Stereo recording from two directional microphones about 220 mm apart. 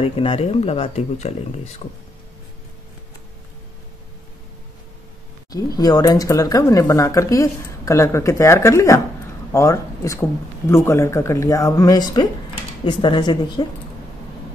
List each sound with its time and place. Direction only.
0.0 s speech: 25° left (ahead or behind)
5.5 s speech: 15° left (ahead or behind)